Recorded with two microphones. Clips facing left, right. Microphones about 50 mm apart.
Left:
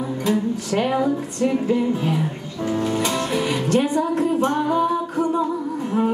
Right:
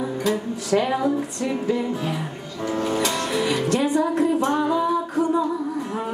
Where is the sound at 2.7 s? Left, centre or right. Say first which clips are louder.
Left 1 dB; centre.